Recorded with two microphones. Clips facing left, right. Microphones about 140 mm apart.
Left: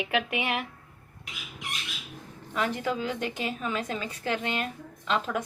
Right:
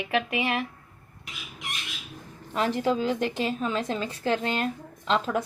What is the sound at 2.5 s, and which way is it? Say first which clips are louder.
A woman's voice: right 4 dB; 35° right (ahead or behind).